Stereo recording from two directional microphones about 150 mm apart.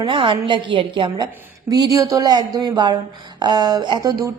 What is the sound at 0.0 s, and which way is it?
A woman's voice, 35° right (ahead or behind).